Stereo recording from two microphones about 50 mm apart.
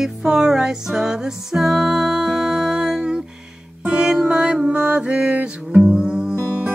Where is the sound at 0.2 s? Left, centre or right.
Centre.